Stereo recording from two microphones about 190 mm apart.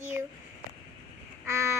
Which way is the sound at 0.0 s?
10° right (ahead or behind).